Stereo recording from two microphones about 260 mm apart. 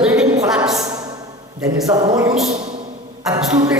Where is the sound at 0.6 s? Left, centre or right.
Centre.